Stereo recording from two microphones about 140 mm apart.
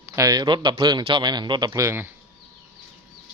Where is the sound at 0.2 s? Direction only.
25° right (ahead or behind).